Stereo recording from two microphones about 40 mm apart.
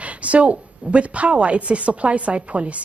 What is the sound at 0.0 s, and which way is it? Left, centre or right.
A woman's voice, right.